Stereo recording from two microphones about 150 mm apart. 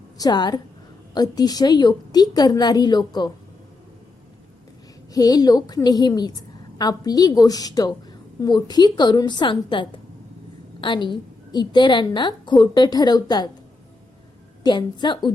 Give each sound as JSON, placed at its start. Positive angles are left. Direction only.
{"t": 0.2, "sound": "a woman's voice", "side_deg": 30}
{"t": 5.1, "sound": "a woman's voice", "side_deg": 25}
{"t": 14.6, "sound": "a woman's voice", "side_deg": 30}